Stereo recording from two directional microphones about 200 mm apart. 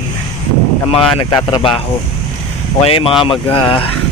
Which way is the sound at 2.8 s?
25° left (ahead or behind).